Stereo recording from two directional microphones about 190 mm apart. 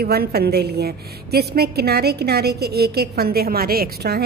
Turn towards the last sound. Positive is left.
turn(degrees=-55)  # may be behind; listen again after turning